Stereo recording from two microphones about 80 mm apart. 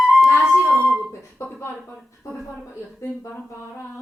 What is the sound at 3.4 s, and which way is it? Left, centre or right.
Speech, left.